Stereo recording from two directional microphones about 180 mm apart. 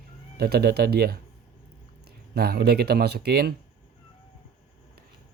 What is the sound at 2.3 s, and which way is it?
A man's voice, 60° right (ahead or behind).